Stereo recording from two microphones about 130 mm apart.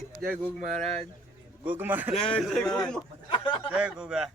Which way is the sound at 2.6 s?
25° left (ahead or behind).